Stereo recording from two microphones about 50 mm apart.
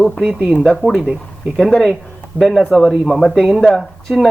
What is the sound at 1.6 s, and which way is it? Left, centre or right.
Speech, centre.